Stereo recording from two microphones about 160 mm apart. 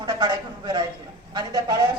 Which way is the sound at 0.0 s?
25° right (ahead or behind).